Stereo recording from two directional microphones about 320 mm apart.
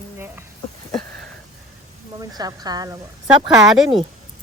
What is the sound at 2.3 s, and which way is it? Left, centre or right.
A woman's voice, centre.